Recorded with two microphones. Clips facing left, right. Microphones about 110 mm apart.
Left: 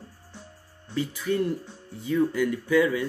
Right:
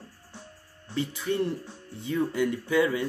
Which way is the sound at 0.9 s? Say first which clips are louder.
Left 2 dB; 25° right (ahead or behind).